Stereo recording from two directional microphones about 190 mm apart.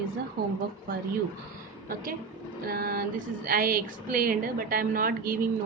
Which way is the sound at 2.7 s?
50° right (ahead or behind).